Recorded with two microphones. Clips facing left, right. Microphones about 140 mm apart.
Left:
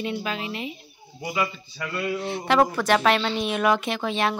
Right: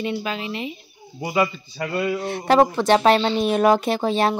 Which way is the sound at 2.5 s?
25° right (ahead or behind).